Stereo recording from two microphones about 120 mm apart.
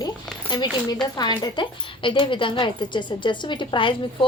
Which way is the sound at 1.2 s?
40° left (ahead or behind).